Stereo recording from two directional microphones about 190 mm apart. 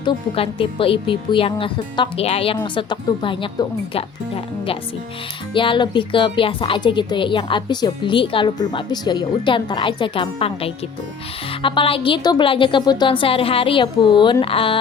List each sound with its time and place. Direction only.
0.0 s speech: 30° left (ahead or behind)